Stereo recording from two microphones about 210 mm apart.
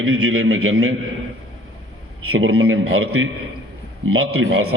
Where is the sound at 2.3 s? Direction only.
80° right.